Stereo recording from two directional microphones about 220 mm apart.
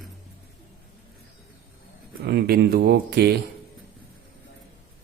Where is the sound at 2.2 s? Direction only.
45° right (ahead or behind).